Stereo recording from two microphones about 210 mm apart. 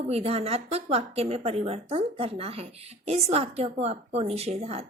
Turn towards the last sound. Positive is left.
turn(degrees=-30)  # may be behind; listen again after turning